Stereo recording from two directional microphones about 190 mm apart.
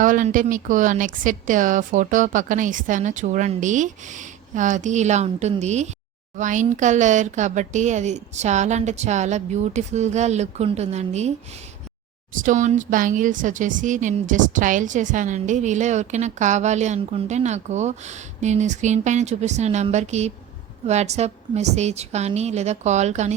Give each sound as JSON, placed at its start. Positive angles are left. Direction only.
{"t": 0.0, "sound": "speech", "side_deg": -45}
{"t": 12.3, "sound": "speech", "side_deg": -45}